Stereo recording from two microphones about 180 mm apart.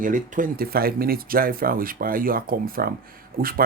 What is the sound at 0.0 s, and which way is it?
Speech, 50° right (ahead or behind).